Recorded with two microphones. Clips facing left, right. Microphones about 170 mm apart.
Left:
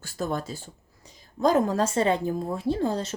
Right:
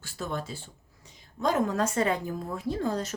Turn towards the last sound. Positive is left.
turn(degrees=30)  # may be behind; listen again after turning